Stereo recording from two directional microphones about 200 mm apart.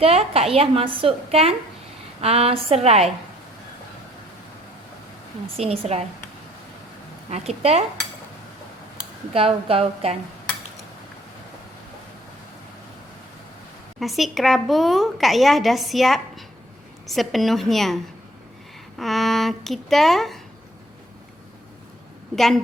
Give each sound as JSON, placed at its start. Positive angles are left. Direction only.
{"t": 0.0, "sound": "a woman's voice", "side_deg": -30}
{"t": 5.5, "sound": "a woman's voice", "side_deg": -30}
{"t": 7.3, "sound": "a woman's voice", "side_deg": -30}
{"t": 9.3, "sound": "a woman's voice", "side_deg": -30}
{"t": 14.0, "sound": "a woman's voice", "side_deg": 0}
{"t": 22.4, "sound": "a woman's voice", "side_deg": 0}